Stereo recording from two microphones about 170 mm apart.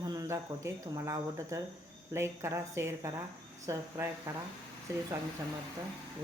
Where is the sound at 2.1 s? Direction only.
15° right (ahead or behind).